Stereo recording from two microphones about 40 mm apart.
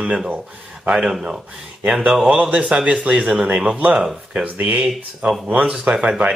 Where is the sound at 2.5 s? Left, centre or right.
Right.